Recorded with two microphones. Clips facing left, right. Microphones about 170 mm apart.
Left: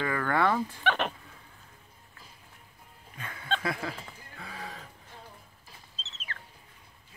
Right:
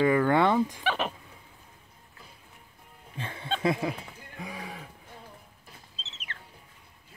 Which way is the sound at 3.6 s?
20° right (ahead or behind).